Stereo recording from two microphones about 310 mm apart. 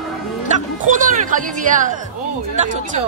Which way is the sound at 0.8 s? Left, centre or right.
Right.